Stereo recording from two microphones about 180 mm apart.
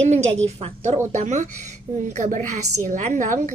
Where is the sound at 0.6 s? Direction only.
35° right (ahead or behind).